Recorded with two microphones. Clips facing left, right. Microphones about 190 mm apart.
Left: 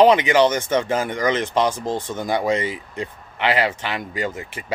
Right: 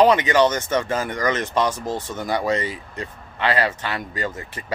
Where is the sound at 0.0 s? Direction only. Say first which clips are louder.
Left 2 dB; 15° left (ahead or behind).